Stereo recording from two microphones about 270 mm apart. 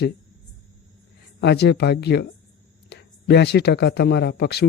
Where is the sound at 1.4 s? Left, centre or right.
Left.